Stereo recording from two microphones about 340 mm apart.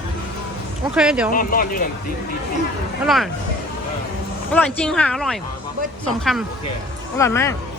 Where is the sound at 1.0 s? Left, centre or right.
Centre.